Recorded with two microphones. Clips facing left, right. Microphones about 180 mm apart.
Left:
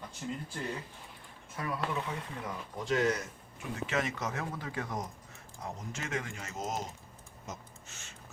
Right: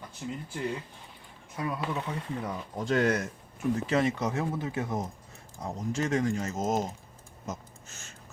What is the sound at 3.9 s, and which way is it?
Speech, 30° right (ahead or behind).